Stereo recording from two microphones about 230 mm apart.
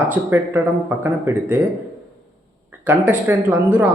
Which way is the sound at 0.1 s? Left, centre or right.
Centre.